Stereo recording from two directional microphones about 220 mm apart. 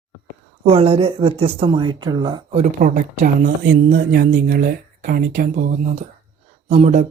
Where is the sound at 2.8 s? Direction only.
35° right (ahead or behind).